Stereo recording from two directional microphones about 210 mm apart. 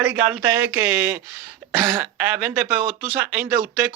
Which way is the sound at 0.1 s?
5° right (ahead or behind).